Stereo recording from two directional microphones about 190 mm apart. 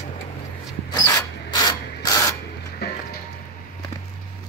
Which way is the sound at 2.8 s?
55° left (ahead or behind).